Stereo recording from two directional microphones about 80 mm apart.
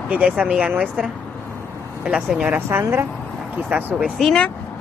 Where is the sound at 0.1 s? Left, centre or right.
Centre.